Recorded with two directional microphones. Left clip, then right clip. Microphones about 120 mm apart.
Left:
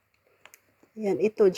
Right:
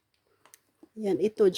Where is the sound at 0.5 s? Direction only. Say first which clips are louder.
Even; 15° right (ahead or behind).